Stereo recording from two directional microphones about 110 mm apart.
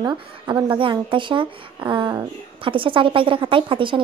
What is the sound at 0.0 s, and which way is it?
Speech, 30° right (ahead or behind).